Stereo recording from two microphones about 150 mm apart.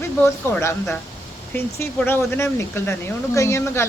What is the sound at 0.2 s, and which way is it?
A woman's voice, 15° left (ahead or behind).